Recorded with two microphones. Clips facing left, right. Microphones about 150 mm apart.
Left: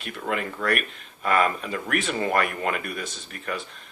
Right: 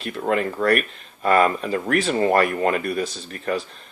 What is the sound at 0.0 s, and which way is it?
Speech, 35° right (ahead or behind).